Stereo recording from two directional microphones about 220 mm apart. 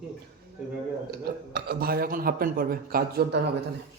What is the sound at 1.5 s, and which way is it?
A man's voice, 45° right (ahead or behind).